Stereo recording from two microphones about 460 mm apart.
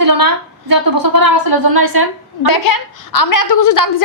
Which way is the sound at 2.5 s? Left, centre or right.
Left.